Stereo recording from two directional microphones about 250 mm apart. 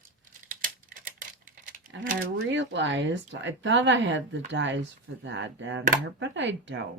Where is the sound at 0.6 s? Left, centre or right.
Right.